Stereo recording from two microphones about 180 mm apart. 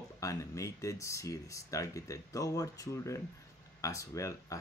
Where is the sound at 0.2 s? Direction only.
20° left (ahead or behind).